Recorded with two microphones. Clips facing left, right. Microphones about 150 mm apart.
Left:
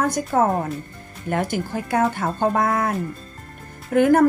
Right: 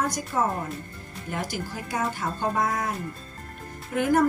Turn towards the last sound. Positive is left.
turn(degrees=55)  # may be behind; listen again after turning